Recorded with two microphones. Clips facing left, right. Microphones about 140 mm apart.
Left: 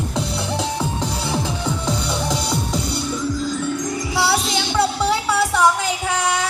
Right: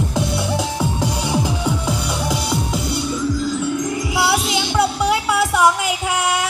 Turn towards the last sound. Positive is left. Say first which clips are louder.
# right 1 dB
turn(degrees=-10)  # may be behind; listen again after turning